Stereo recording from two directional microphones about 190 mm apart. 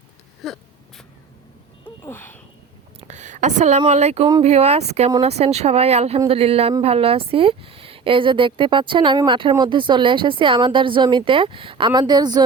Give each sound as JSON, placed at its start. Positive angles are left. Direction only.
{"t": 0.4, "sound": "a sound", "side_deg": 0}
{"t": 2.0, "sound": "speech", "side_deg": 10}
{"t": 3.0, "sound": "a woman's voice", "side_deg": -40}